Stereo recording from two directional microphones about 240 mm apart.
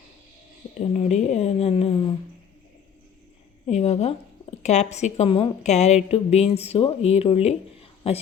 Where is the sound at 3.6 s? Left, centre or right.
Left.